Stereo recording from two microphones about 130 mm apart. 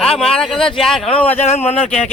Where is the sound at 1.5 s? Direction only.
55° left (ahead or behind).